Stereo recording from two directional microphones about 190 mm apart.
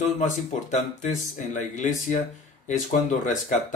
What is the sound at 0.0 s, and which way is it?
Speech, 40° left (ahead or behind).